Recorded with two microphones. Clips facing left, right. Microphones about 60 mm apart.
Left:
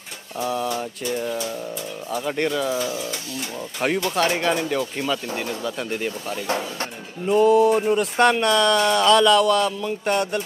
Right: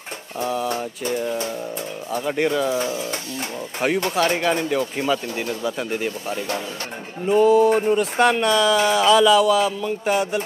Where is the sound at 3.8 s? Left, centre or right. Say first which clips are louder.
Right 1 dB; centre.